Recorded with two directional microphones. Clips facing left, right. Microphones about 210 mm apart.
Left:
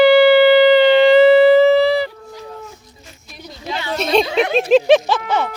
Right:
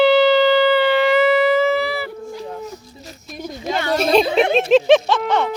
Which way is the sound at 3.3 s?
45° right (ahead or behind).